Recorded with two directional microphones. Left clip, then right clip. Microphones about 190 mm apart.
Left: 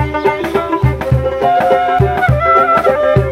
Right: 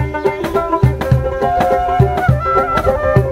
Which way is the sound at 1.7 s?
35° left (ahead or behind).